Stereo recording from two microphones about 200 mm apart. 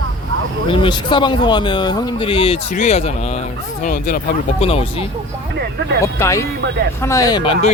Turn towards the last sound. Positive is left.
turn(degrees=25)  # may be behind; listen again after turning